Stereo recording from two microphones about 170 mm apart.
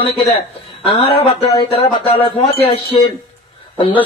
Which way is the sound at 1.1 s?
35° left (ahead or behind).